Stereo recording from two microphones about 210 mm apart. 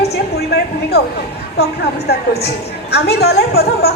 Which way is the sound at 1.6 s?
50° left (ahead or behind).